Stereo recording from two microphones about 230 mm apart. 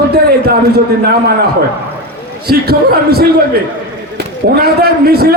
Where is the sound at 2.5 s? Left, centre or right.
Right.